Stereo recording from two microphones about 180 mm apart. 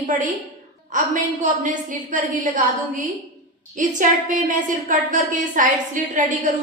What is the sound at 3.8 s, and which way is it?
A woman's voice, 45° right (ahead or behind).